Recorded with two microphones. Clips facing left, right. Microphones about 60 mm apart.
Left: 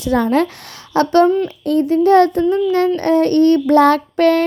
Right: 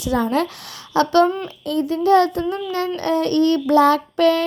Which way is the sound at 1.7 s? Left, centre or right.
Left.